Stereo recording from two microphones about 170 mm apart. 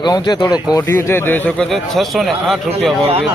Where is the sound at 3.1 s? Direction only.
35° right (ahead or behind).